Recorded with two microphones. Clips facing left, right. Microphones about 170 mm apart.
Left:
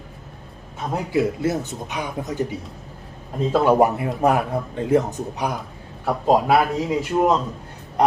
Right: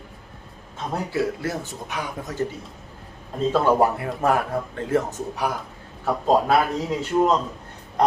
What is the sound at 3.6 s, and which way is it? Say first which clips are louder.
Speech: left 5 dB; 20° left (ahead or behind).